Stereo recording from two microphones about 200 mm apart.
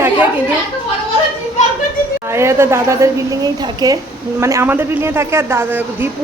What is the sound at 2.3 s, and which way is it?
A woman's voice, 15° right (ahead or behind).